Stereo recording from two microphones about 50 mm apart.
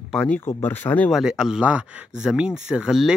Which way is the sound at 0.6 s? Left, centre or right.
Left.